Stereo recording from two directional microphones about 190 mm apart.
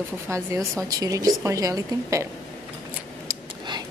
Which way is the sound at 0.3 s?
15° right (ahead or behind).